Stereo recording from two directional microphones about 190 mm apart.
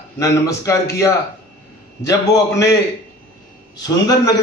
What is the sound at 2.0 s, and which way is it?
Speech, 20° left (ahead or behind).